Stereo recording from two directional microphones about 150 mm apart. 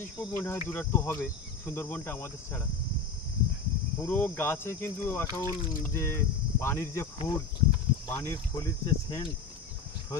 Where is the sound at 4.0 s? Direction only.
15° left (ahead or behind).